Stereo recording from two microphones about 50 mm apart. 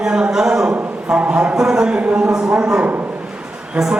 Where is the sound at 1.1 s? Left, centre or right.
Right.